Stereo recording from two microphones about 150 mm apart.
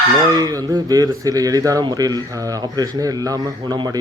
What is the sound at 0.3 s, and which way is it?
Speech, 25° right (ahead or behind).